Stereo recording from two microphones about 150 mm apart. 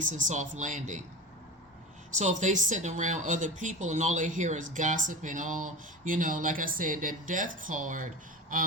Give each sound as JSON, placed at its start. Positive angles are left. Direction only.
{"t": 0.0, "sound": "speech", "side_deg": -55}
{"t": 2.1, "sound": "speech", "side_deg": -55}